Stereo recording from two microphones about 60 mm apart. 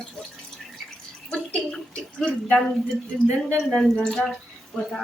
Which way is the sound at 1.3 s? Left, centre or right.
Centre.